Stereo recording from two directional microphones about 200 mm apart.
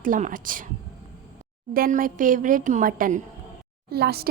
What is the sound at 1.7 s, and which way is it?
Speech, 45° right (ahead or behind).